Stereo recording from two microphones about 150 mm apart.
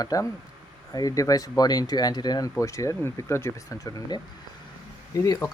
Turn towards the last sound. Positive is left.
turn(degrees=20)  # may be behind; listen again after turning